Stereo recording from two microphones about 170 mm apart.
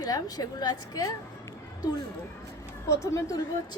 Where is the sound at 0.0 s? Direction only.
20° left (ahead or behind).